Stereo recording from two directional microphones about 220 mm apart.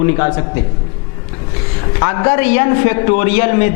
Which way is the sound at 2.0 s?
20° left (ahead or behind).